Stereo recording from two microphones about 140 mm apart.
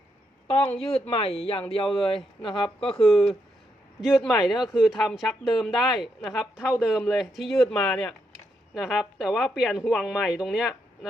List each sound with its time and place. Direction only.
0.8 s speech: 5° left (ahead or behind)
1.0 s speech: 45° left (ahead or behind)
2.9 s speech: 5° left (ahead or behind)